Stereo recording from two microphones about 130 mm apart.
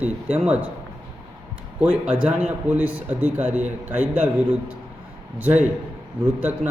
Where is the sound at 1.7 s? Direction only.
10° right (ahead or behind).